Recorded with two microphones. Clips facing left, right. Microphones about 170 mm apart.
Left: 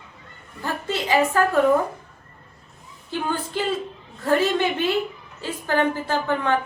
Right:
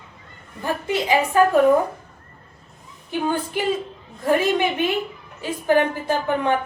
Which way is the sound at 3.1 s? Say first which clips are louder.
Right 3 dB; 15° right (ahead or behind).